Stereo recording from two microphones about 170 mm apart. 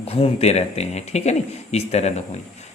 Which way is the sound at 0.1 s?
35° left (ahead or behind).